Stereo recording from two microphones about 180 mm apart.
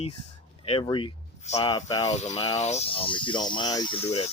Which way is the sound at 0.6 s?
30° left (ahead or behind).